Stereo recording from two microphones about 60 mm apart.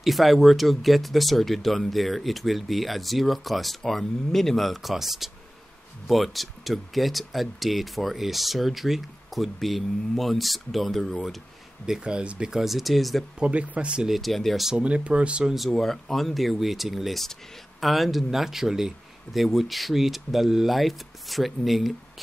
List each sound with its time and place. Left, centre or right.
0.0 s speech: centre
11.8 s speech: centre
13.4 s speech: centre
14.0 s speech: centre
14.8 s speech: centre
15.7 s speech: centre